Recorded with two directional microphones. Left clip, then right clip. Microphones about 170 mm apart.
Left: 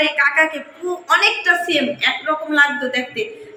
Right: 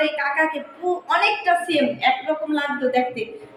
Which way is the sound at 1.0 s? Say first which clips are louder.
Left 5 dB; 10° right (ahead or behind).